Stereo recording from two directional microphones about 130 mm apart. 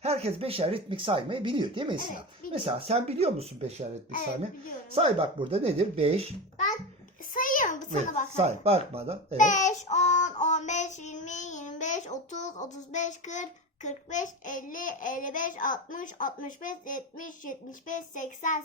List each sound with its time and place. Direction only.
0.0 s speech: 50° right (ahead or behind)
2.5 s speech: 50° right (ahead or behind)
4.1 s a child's voice: 90° left
4.9 s speech: 50° right (ahead or behind)
7.3 s a sound: 90° left
8.0 s speech: 65° left (ahead or behind)
8.4 s speech: 50° right (ahead or behind)
9.4 s child singing: 70° left (ahead or behind)